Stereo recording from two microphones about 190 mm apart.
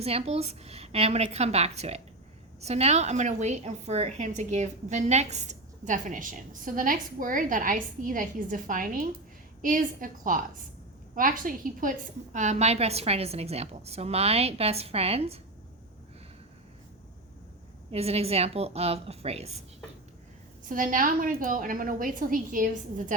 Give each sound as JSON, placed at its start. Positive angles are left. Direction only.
{"t": 0.0, "sound": "a woman's voice", "side_deg": -30}
{"t": 17.9, "sound": "a woman's voice", "side_deg": -30}
{"t": 20.7, "sound": "a woman's voice", "side_deg": -45}